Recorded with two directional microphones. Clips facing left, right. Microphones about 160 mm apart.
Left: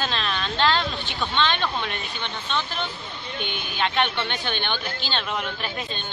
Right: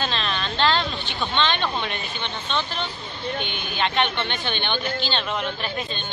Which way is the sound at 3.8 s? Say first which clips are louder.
Right 1 dB; 5° left (ahead or behind).